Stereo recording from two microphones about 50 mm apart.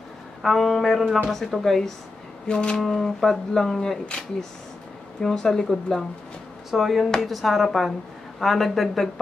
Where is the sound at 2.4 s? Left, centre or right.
Centre.